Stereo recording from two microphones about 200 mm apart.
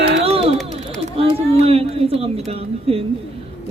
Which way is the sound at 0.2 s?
30° right (ahead or behind).